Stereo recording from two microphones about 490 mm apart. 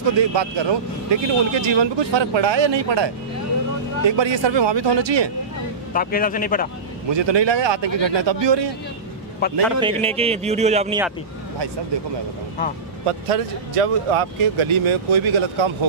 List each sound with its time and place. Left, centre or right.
0.2 s speech: right
5.9 s a man's voice: centre
7.1 s speech: right
9.8 s speech: centre
13.0 s speech: right